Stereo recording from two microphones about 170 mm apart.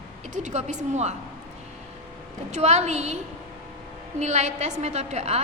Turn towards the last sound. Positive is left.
turn(degrees=-40)  # may be behind; listen again after turning